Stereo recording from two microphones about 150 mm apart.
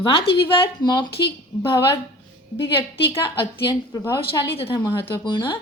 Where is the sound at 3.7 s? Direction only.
20° left (ahead or behind).